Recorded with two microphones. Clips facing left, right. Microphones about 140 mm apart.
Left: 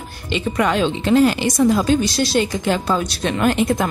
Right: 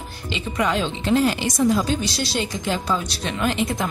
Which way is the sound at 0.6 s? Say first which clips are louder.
Left 4 dB; 65° left (ahead or behind).